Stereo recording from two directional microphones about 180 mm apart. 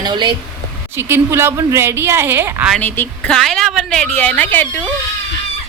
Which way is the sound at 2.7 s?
10° left (ahead or behind).